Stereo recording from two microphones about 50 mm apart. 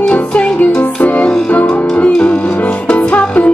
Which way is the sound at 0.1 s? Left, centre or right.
Left.